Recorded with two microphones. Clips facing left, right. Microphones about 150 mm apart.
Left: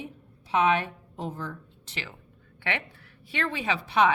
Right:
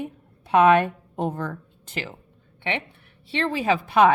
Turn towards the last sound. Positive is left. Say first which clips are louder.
# right 6 dB
turn(degrees=-50)  # may be behind; listen again after turning